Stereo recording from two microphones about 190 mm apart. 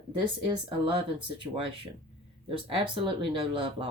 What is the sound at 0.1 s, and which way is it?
Speech, 25° right (ahead or behind).